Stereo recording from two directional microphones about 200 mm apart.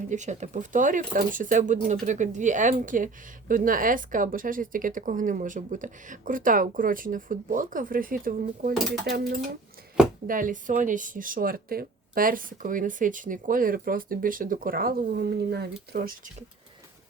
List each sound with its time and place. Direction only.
0.1 s speech: 35° right (ahead or behind); by 16.1 s 50° right (ahead or behind)